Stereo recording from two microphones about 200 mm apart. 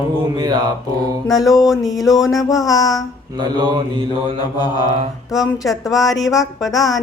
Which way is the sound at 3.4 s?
20° right (ahead or behind).